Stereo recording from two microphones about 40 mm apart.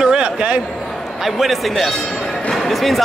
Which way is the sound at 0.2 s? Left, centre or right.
Right.